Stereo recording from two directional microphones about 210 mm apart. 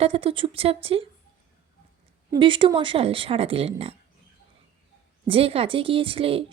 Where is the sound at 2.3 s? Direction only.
25° right (ahead or behind).